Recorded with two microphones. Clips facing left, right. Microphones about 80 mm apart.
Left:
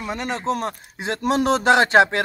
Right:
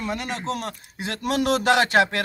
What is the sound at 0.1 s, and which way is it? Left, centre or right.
A man's voice, left.